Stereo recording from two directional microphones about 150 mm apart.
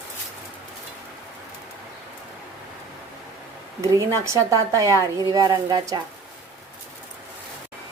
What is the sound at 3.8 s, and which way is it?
Speech, 20° right (ahead or behind).